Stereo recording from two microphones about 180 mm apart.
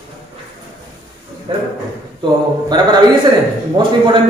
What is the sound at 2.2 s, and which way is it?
A man's voice, 25° right (ahead or behind).